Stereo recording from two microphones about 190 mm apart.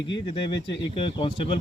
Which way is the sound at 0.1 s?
25° left (ahead or behind).